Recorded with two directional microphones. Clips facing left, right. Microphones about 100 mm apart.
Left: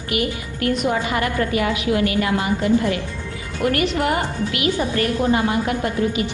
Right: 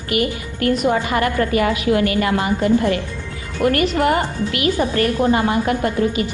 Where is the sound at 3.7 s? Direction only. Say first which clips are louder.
Right 3 dB; 45° right (ahead or behind).